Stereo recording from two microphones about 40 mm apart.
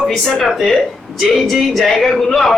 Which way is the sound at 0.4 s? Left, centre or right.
Centre.